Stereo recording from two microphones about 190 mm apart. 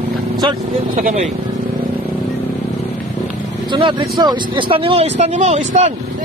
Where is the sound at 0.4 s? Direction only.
25° right (ahead or behind).